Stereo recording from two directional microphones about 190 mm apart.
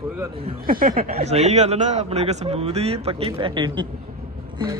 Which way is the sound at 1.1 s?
35° right (ahead or behind).